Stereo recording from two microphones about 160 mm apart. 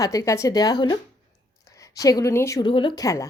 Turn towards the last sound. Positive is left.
turn(degrees=20)  # may be behind; listen again after turning